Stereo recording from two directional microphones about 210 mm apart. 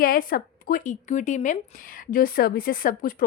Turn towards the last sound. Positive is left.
turn(degrees=40)  # may be behind; listen again after turning